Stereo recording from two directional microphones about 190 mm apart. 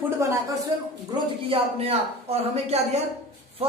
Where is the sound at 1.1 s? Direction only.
30° right (ahead or behind).